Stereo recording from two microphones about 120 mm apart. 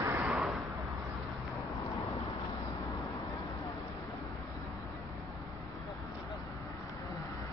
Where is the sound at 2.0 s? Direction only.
25° left (ahead or behind).